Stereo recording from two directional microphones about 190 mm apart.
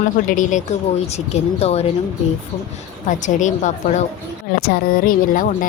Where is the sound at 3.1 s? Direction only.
40° left (ahead or behind).